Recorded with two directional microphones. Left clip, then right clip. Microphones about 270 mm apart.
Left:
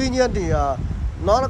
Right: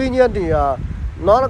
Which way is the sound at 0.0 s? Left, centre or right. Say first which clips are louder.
Right 5 dB; centre.